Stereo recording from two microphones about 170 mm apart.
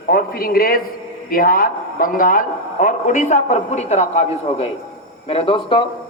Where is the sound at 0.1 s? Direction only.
60° left (ahead or behind).